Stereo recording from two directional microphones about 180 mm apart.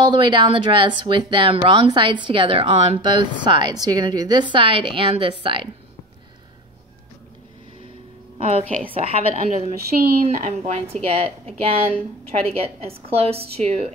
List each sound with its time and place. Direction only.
0.0 s speech: 25° right (ahead or behind)
8.4 s a woman's voice: 35° right (ahead or behind)